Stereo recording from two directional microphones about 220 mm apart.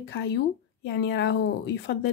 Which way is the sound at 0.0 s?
50° left (ahead or behind).